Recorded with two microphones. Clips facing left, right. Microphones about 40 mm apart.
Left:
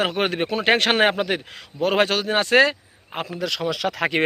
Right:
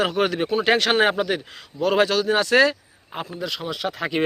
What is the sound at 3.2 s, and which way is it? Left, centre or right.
Speech, left.